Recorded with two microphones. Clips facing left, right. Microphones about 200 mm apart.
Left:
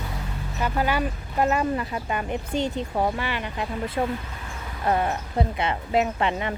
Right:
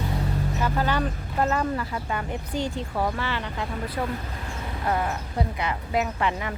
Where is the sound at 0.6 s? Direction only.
15° left (ahead or behind).